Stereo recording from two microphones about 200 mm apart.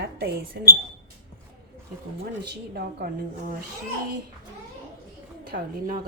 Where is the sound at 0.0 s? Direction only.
55° right (ahead or behind).